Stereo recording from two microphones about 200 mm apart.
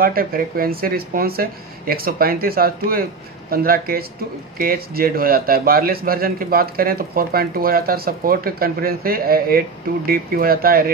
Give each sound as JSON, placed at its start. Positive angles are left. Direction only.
{"t": 0.0, "sound": "a man's voice", "side_deg": -45}